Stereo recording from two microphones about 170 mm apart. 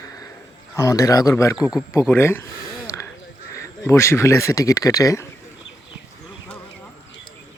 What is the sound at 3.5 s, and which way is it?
Speech, 15° left (ahead or behind).